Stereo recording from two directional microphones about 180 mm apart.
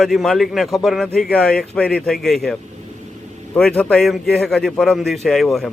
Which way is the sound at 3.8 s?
5° left (ahead or behind).